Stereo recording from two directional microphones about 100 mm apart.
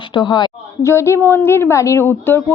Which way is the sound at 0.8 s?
30° left (ahead or behind).